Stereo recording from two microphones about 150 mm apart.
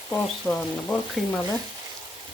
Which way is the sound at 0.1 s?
10° left (ahead or behind).